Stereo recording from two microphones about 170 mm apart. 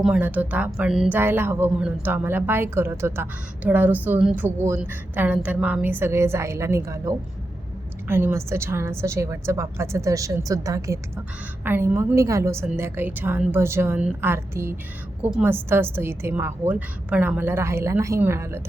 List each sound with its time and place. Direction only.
0.0 s a woman's voice: 10° right (ahead or behind)